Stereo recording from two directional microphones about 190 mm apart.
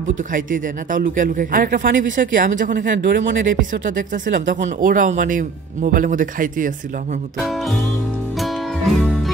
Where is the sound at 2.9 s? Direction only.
65° right (ahead or behind).